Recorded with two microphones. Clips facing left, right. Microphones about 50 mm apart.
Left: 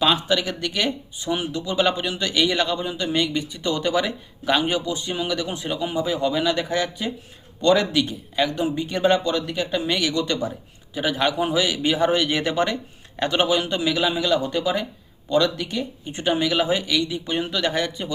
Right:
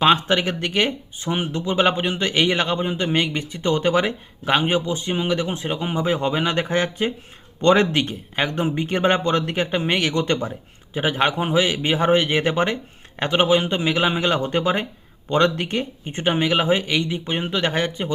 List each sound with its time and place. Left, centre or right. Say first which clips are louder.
0.0 s speech: right 3 dB; right